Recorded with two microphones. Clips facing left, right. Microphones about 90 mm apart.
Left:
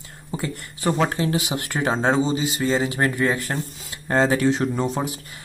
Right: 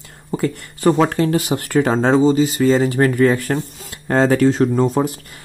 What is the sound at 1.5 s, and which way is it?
Speech, 35° right (ahead or behind).